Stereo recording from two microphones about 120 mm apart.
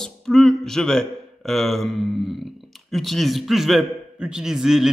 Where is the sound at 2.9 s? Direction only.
Centre (ahead or behind).